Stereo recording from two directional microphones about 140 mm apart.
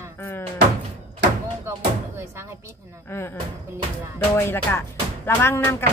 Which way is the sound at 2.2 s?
20° right (ahead or behind).